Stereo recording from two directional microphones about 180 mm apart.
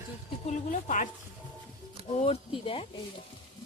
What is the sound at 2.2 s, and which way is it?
Speech, 30° left (ahead or behind).